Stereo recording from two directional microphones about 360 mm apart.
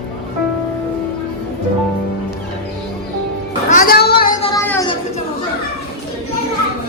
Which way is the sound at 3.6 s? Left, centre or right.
Left.